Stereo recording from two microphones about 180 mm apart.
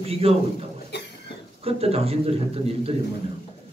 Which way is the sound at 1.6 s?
35° right (ahead or behind).